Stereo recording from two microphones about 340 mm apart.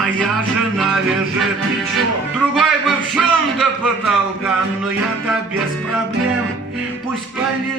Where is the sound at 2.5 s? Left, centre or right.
Centre.